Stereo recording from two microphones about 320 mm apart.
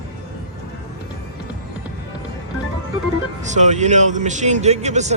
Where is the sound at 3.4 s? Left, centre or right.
Right.